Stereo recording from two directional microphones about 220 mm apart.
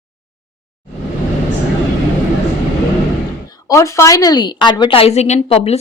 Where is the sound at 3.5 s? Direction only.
15° left (ahead or behind).